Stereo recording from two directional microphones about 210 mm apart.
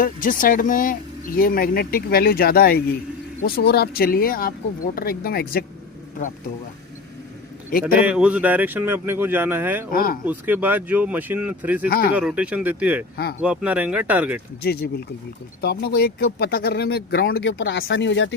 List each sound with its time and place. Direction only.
0.0 s speech: 40° left (ahead or behind)
7.7 s speech: 40° left (ahead or behind)
8.0 s speech: 5° right (ahead or behind)
9.9 s speech: 45° left (ahead or behind)
10.2 s speech: 10° right (ahead or behind)
11.9 s speech: 45° left (ahead or behind)
12.1 s speech: 5° right (ahead or behind)
14.6 s speech: 50° left (ahead or behind)
17.5 s speech: 65° left (ahead or behind)